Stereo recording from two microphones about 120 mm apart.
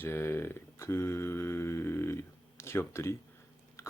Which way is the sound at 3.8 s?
25° left (ahead or behind).